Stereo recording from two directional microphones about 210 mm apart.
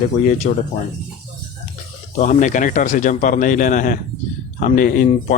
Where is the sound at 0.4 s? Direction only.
35° left (ahead or behind).